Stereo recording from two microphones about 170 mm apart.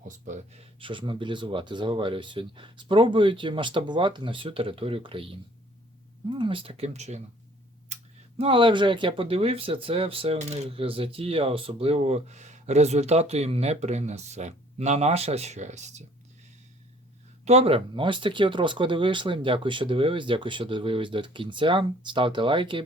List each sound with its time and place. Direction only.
0.8 s speech: 30° right (ahead or behind)
8.4 s speech: 30° right (ahead or behind)
17.4 s speech: 35° right (ahead or behind)